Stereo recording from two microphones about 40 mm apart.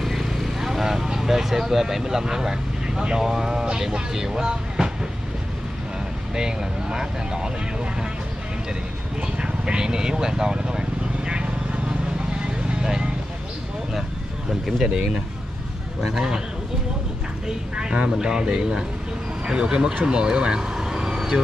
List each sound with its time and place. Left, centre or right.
0.0 s vehicle: centre
3.0 s speech: centre
6.3 s speech: centre
9.4 s vehicle: right
14.5 s speech: centre
17.7 s speech: right
20.1 s vehicle: right